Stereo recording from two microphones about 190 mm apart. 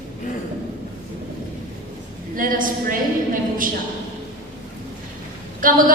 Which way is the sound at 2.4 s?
45° right (ahead or behind).